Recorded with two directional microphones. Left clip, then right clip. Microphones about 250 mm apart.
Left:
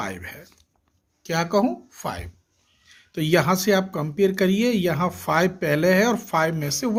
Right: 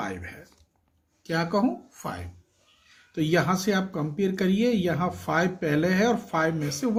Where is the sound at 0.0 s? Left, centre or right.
Left.